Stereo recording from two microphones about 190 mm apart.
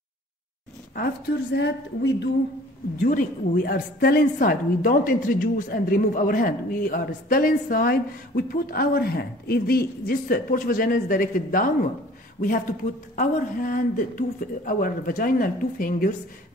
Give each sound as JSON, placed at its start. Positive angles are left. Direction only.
{"t": 0.9, "sound": "a woman's voice", "side_deg": 55}
{"t": 3.0, "sound": "a woman's voice", "side_deg": 50}